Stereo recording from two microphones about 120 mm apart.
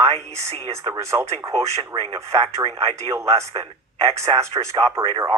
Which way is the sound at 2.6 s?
55° right (ahead or behind).